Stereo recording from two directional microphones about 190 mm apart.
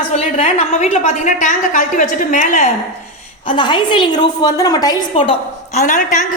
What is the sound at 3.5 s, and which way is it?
A woman's voice, 25° left (ahead or behind).